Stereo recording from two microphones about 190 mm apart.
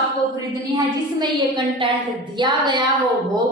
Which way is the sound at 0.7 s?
25° right (ahead or behind).